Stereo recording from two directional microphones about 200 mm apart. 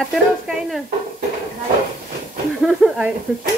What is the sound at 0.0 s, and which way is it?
Speech, centre (ahead or behind).